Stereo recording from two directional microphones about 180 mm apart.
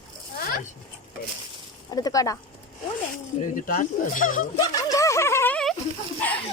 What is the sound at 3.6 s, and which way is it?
Speech, 50° left (ahead or behind).